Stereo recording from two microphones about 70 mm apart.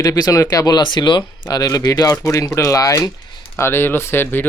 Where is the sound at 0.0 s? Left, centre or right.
Left.